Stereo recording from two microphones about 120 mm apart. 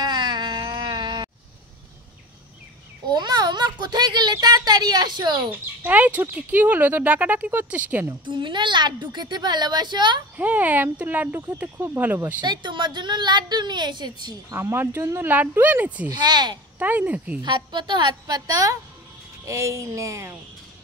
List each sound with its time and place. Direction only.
0.0 s a sound: 40° right (ahead or behind)
3.1 s a sound: 35° right (ahead or behind)
5.5 s speech: 15° right (ahead or behind)
8.1 s a woman's voice: 40° right (ahead or behind)
10.3 s speech: 15° right (ahead or behind)
12.4 s a woman's voice: 40° right (ahead or behind)
14.5 s speech: 20° right (ahead or behind)
16.1 s a woman's voice: 35° right (ahead or behind)
16.7 s speech: 15° right (ahead or behind)
17.4 s a woman's voice: 40° right (ahead or behind)